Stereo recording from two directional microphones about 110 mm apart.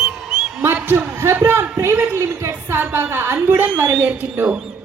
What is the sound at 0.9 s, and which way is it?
A woman's voice, 25° right (ahead or behind).